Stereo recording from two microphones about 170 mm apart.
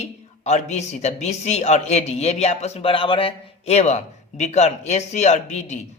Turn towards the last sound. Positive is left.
turn(degrees=45)  # may be behind; listen again after turning